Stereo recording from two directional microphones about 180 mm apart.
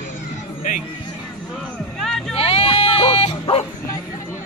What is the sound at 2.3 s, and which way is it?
Bow-wow, 30° left (ahead or behind).